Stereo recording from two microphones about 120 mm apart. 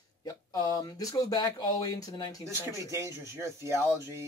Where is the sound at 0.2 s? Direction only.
30° left (ahead or behind).